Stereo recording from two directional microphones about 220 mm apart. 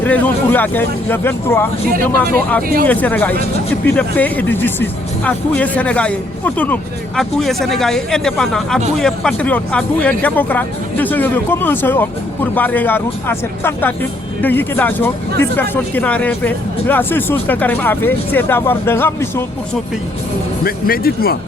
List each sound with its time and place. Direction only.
0.0 s speech: 5° left (ahead or behind)
2.8 s speech: 5° left (ahead or behind)
20.7 s speech: 45° left (ahead or behind)